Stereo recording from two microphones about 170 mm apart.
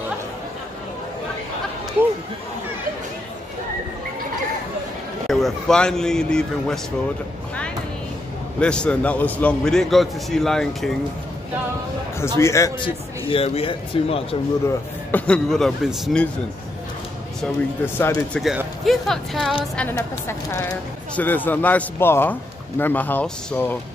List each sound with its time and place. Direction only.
5.3 s a man's voice: 5° left (ahead or behind)
8.5 s a man's voice: 5° left (ahead or behind)
12.4 s a man's voice: 15° left (ahead or behind); by 14.2 s 35° left (ahead or behind)
15.0 s a man's voice: 10° left (ahead or behind)
17.8 s a man's voice: 15° left (ahead or behind)